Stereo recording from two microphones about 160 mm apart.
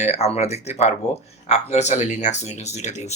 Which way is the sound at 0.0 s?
40° left (ahead or behind).